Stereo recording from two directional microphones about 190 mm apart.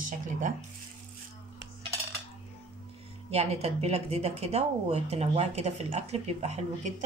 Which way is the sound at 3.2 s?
35° right (ahead or behind).